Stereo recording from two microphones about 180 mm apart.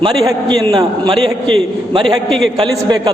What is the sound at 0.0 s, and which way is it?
A man's voice, 20° right (ahead or behind).